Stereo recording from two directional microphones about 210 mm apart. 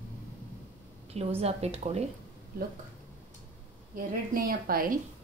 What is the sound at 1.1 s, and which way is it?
Speech, 30° right (ahead or behind).